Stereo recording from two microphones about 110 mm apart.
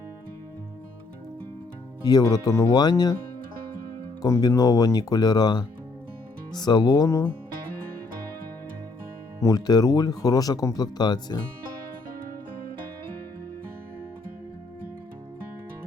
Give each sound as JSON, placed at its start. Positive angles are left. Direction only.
{"t": 2.0, "sound": "speech", "side_deg": 35}
{"t": 4.2, "sound": "speech", "side_deg": 35}
{"t": 9.4, "sound": "speech", "side_deg": 35}